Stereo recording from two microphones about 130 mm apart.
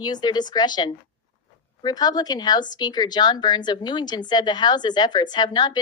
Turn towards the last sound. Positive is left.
turn(degrees=35)  # may be behind; listen again after turning